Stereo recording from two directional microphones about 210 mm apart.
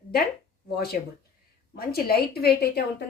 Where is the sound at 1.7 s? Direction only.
45° left (ahead or behind).